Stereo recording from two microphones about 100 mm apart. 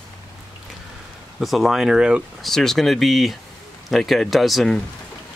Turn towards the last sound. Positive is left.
turn(degrees=0)  # may be behind; listen again after turning